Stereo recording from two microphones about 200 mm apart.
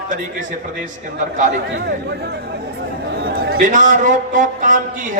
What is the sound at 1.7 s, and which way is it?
A man's voice, 55° right (ahead or behind).